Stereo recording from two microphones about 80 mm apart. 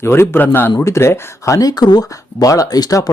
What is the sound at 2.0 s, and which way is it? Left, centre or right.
Speech, left.